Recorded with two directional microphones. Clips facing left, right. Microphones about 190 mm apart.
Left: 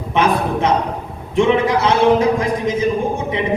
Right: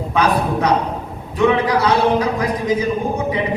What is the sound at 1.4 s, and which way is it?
A woman's voice, 25° left (ahead or behind).